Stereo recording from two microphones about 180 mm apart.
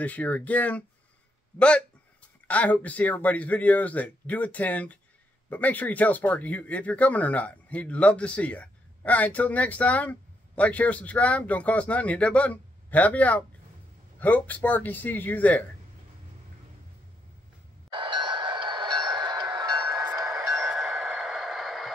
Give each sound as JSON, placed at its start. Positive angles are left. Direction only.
{"t": 0.0, "sound": "speech", "side_deg": 10}
{"t": 2.4, "sound": "speech", "side_deg": 10}
{"t": 17.9, "sound": "wind chime", "side_deg": -25}
{"t": 20.2, "sound": "train", "side_deg": -20}
{"t": 20.4, "sound": "train", "side_deg": 0}